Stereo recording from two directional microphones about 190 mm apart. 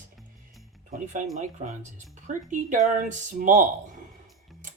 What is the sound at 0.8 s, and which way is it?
Speech, 40° right (ahead or behind).